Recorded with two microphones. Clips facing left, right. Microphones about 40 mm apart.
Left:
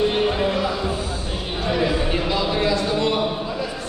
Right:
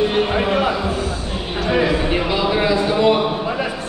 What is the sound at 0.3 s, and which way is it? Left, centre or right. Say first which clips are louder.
Music: right 4 dB; right.